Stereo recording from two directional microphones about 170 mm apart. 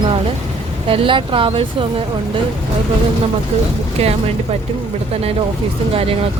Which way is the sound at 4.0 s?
40° right (ahead or behind).